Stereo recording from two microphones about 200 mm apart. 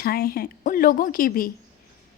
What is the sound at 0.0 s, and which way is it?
A woman's voice, 50° left (ahead or behind).